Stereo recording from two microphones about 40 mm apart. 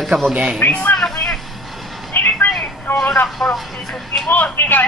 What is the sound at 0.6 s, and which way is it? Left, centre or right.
Speech, left.